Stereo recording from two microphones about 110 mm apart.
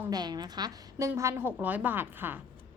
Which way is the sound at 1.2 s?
25° right (ahead or behind).